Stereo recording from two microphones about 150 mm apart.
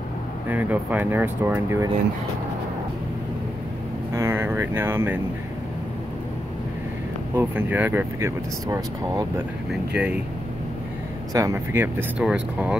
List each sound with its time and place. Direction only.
0.5 s speech: 10° right (ahead or behind)
4.1 s a sound: 15° right (ahead or behind)
7.3 s speech: 10° right (ahead or behind)
9.7 s speech: 10° right (ahead or behind)
11.3 s speech: 20° right (ahead or behind)